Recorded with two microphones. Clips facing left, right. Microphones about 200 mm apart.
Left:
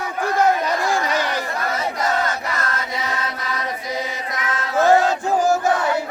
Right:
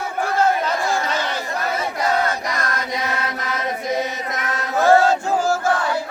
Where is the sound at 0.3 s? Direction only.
15° left (ahead or behind).